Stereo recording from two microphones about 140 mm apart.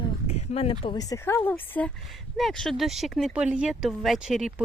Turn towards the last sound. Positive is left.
turn(degrees=0)  # may be behind; listen again after turning